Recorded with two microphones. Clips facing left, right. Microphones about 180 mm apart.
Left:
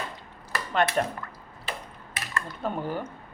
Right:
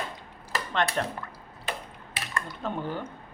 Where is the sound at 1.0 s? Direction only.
15° left (ahead or behind).